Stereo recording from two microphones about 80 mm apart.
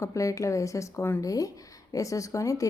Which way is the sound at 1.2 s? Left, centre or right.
Left.